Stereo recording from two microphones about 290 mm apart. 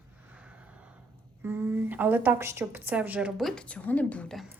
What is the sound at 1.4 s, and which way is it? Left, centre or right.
A woman's voice, centre.